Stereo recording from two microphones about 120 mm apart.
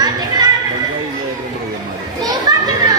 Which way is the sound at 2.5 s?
30° right (ahead or behind).